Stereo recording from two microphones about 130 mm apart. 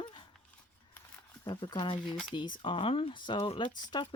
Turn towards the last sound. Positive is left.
turn(degrees=35)  # may be behind; listen again after turning